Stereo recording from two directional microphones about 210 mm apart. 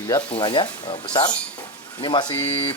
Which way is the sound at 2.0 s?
20° left (ahead or behind).